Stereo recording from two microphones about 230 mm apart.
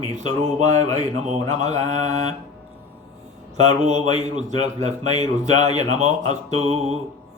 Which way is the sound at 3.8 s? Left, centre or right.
Right.